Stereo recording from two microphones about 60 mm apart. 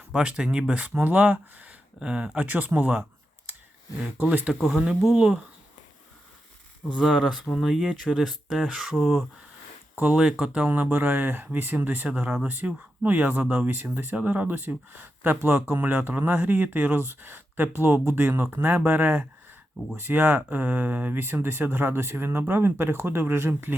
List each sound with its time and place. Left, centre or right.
0.1 s speech: centre
2.0 s speech: centre
4.5 s speech: centre
7.0 s speech: centre
9.9 s speech: right
10.2 s speech: centre
10.7 s speech: right